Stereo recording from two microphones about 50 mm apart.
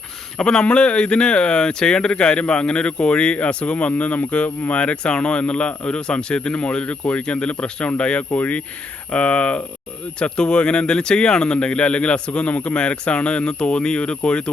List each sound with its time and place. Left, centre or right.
0.3 s speech: centre